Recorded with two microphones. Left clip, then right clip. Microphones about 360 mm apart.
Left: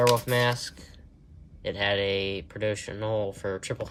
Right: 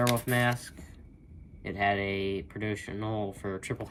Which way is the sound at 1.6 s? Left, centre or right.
Centre.